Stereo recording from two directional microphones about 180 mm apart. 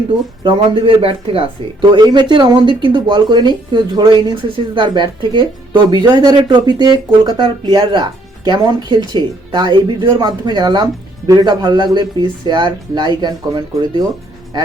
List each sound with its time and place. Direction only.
0.4 s speech: 30° right (ahead or behind)